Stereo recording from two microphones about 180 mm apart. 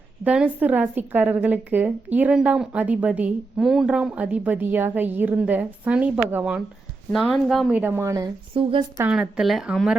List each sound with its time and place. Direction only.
0.3 s a woman's voice: 5° right (ahead or behind)
8.5 s speech: 30° right (ahead or behind)
9.0 s a woman's voice: 5° right (ahead or behind)